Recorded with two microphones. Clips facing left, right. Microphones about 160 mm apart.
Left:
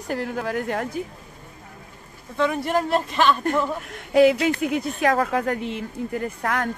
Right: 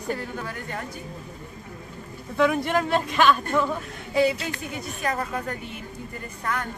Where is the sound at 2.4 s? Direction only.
Centre (ahead or behind).